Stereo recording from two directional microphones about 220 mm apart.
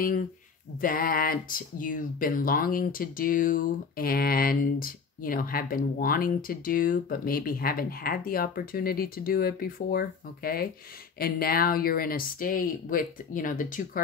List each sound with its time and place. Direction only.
0.7 s speech: 40° left (ahead or behind)